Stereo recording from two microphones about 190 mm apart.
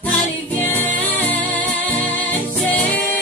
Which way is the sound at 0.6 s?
10° left (ahead or behind).